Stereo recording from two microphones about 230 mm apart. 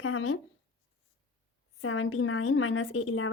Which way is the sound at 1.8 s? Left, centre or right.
Left.